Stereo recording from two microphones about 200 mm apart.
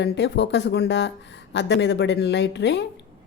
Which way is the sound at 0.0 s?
60° left (ahead or behind).